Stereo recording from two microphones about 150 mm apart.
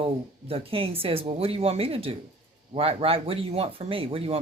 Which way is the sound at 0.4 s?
40° right (ahead or behind).